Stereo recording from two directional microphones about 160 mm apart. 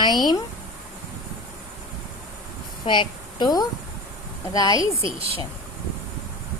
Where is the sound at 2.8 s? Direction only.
30° left (ahead or behind).